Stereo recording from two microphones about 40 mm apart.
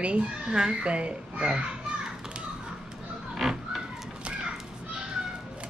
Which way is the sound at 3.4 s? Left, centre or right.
Centre.